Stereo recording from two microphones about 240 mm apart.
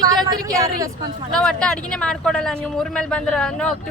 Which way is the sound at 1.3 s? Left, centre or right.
Centre.